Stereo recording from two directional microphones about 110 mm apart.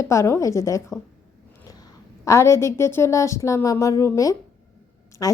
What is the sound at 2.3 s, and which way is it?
A woman's voice, 25° left (ahead or behind).